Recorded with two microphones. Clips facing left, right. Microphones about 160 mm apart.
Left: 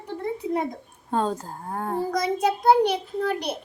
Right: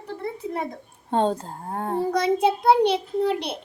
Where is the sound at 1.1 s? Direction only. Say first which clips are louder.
Right 3 dB; 30° right (ahead or behind).